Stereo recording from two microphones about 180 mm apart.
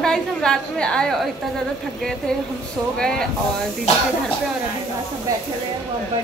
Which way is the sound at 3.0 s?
5° left (ahead or behind).